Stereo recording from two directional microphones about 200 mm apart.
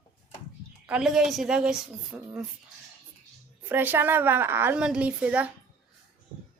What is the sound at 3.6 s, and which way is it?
A woman's voice, 10° right (ahead or behind).